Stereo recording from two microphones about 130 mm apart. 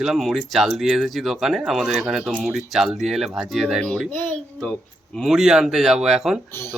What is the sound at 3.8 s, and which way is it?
Speech, 10° left (ahead or behind).